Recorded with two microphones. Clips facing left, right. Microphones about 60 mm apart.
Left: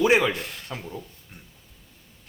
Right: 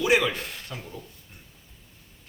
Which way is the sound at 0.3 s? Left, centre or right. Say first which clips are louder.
Left 2 dB; centre.